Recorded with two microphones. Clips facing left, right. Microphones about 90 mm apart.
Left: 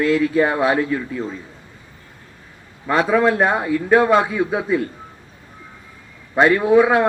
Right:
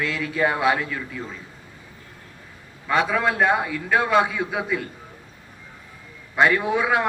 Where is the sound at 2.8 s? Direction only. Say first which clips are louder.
Left 5 dB; 35° left (ahead or behind).